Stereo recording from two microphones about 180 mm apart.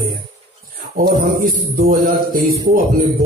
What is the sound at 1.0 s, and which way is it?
Speech, 50° right (ahead or behind).